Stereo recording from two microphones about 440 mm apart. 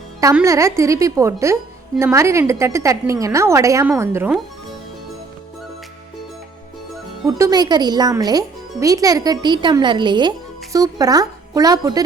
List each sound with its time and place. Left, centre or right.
0.2 s speech: centre
7.3 s speech: centre